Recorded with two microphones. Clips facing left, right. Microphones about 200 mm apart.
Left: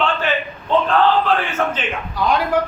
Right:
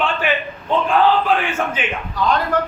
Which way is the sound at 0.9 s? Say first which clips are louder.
Right 2 dB; 15° right (ahead or behind).